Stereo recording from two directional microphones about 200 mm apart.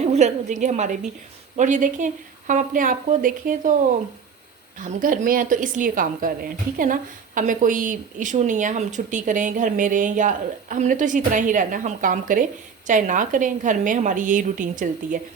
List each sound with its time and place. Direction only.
0.0 s a woman's voice: 35° right (ahead or behind)
4.8 s a woman's voice: 45° right (ahead or behind)